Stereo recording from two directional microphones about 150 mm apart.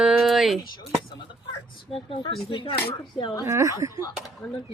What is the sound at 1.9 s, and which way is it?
Speech, 40° left (ahead or behind).